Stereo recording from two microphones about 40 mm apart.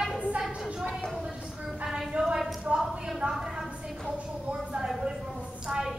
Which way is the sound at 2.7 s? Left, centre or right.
Right.